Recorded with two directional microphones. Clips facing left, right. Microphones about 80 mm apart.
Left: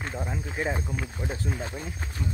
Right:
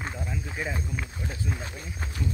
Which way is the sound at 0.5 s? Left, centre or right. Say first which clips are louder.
Left 4 dB; left.